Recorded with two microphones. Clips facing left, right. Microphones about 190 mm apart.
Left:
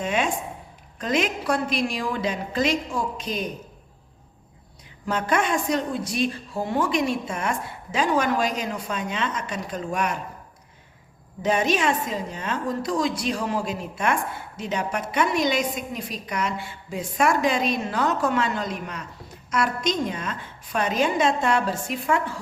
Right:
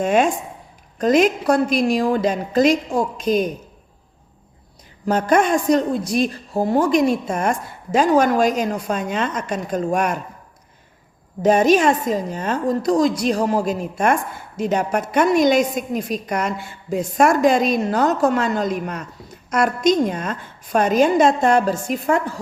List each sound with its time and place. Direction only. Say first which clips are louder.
0.0 s a woman's voice: right 8 dB; 45° right (ahead or behind)
5.0 s a woman's voice: right 7 dB; 40° right (ahead or behind)
11.4 s a woman's voice: right 8 dB; 45° right (ahead or behind)